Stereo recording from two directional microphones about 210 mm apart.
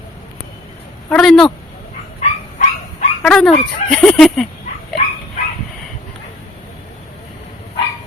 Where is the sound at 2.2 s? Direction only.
35° left (ahead or behind).